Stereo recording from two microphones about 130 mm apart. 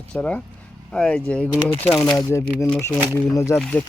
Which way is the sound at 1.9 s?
30° left (ahead or behind).